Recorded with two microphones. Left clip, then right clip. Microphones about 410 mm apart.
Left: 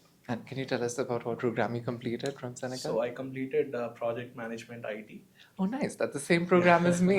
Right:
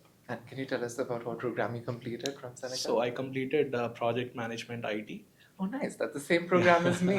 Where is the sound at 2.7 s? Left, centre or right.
Right.